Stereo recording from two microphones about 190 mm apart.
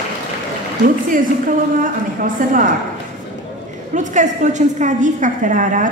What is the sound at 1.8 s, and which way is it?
Speech, 45° right (ahead or behind).